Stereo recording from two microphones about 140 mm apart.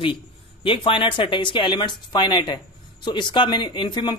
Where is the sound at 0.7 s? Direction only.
40° left (ahead or behind).